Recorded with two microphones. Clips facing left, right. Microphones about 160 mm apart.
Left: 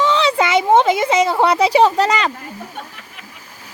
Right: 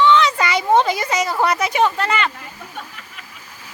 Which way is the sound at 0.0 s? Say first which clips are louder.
Even; 35° left (ahead or behind).